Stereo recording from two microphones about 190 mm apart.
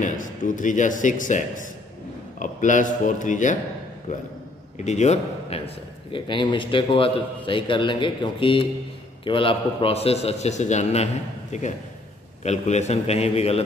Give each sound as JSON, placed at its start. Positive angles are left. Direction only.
{"t": 0.0, "sound": "a man's voice", "side_deg": 40}
{"t": 6.1, "sound": "a man's voice", "side_deg": 25}
{"t": 12.4, "sound": "a man's voice", "side_deg": 35}